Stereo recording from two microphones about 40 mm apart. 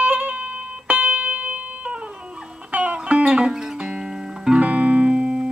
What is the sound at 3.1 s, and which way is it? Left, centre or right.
Music, right.